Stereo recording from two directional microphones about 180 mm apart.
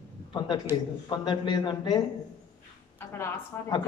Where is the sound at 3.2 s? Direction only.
20° left (ahead or behind).